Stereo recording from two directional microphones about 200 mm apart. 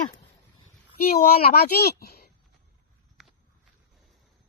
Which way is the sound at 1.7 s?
50° left (ahead or behind).